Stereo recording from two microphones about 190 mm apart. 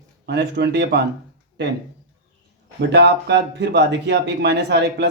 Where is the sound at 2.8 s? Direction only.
65° right (ahead or behind).